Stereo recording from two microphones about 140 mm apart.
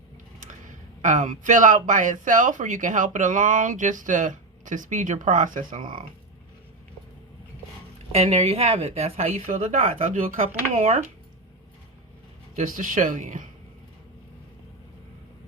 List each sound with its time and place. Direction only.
0.3 s speech: 65° right (ahead or behind)
8.1 s a woman's voice: 45° right (ahead or behind)
9.7 s speech: 70° right (ahead or behind); by 11.1 s 55° right (ahead or behind)
12.5 s speech: 70° right (ahead or behind)